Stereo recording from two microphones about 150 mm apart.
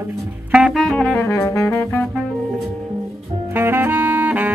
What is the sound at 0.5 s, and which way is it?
Saxophone, 5° right (ahead or behind).